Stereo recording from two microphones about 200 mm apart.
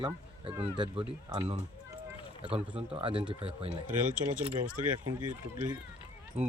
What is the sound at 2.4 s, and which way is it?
Speech, 30° right (ahead or behind).